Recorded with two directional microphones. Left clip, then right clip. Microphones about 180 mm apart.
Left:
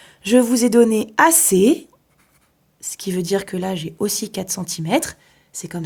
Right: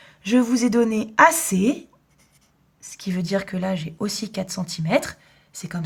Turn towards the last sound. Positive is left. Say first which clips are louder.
# left 4 dB
turn(degrees=25)  # may be behind; listen again after turning